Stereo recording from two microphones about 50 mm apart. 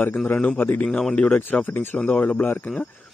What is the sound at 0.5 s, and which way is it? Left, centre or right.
Speech, left.